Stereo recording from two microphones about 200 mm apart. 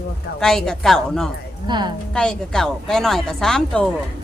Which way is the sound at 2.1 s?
5° left (ahead or behind).